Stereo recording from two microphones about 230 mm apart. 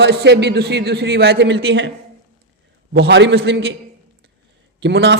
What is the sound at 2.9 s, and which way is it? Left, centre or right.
Speech, right.